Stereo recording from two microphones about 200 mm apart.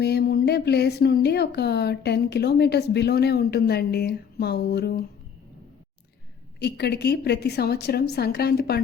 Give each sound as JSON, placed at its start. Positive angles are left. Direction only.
{"t": 0.0, "sound": "a woman's voice", "side_deg": 55}
{"t": 6.6, "sound": "a woman's voice", "side_deg": 55}